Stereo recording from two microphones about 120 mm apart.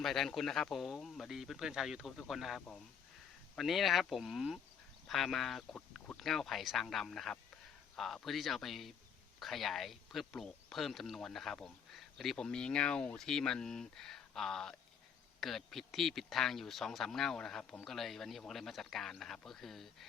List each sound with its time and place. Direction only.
0.0 s speech: centre (ahead or behind)
2.6 s speech: 10° left (ahead or behind)